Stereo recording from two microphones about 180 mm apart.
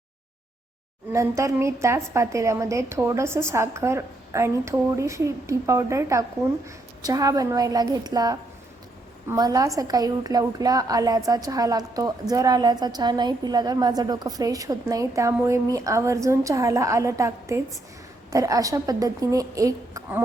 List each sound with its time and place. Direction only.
1.1 s a woman's voice: 15° right (ahead or behind)